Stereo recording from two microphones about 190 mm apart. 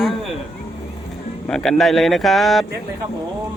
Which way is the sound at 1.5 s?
Centre (ahead or behind).